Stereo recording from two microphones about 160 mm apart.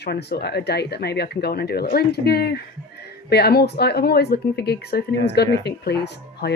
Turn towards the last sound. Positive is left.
turn(degrees=90)